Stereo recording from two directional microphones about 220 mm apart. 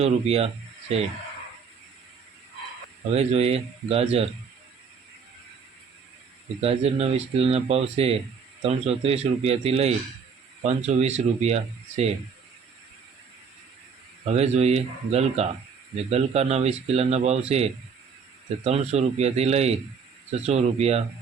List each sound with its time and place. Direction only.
0.0 s speech: 30° right (ahead or behind)
3.1 s speech: 30° right (ahead or behind)
6.6 s speech: 25° right (ahead or behind)
14.3 s speech: 30° right (ahead or behind)